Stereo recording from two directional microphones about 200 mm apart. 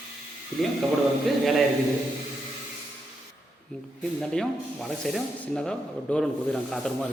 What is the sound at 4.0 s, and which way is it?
Speech, centre (ahead or behind).